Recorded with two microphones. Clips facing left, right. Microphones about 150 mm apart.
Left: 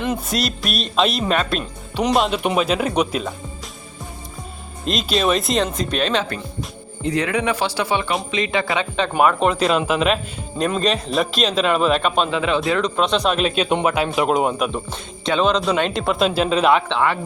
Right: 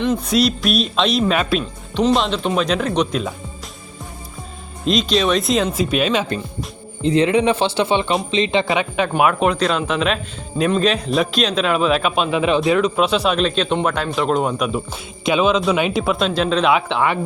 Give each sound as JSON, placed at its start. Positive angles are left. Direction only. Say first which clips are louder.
{"t": 0.0, "sound": "speech", "louder": "right 5 dB", "side_deg": 5}
{"t": 2.0, "sound": "speech", "louder": "right 1 dB", "side_deg": 5}
{"t": 4.9, "sound": "speech", "louder": "right 2 dB", "side_deg": 0}
{"t": 7.0, "sound": "speech", "louder": "right 5 dB", "side_deg": -25}
{"t": 9.0, "sound": "speech", "louder": "left 1 dB", "side_deg": -5}
{"t": 12.3, "sound": "speech", "louder": "right 3 dB", "side_deg": -20}
{"t": 12.8, "sound": "speech", "louder": "right 2 dB", "side_deg": -5}
{"t": 14.7, "sound": "speech", "louder": "right 3 dB", "side_deg": -10}
{"t": 16.7, "sound": "speech", "louder": "even", "side_deg": -15}